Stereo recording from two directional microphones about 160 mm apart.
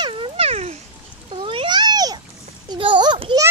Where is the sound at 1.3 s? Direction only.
35° right (ahead or behind).